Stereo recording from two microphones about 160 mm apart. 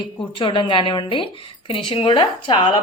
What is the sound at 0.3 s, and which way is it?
A woman's voice, 30° left (ahead or behind).